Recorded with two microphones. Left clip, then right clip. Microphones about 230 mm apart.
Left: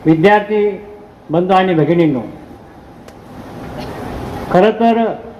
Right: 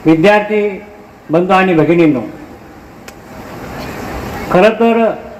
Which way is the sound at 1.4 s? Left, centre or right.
Right.